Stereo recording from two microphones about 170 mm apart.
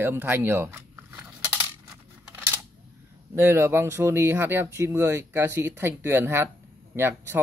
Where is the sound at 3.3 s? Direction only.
15° right (ahead or behind).